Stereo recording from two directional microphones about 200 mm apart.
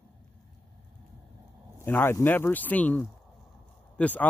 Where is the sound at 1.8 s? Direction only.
10° left (ahead or behind).